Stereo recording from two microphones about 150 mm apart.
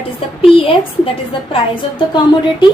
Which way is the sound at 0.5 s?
35° left (ahead or behind).